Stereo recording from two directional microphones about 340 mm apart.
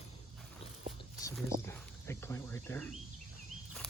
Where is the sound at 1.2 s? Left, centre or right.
Centre.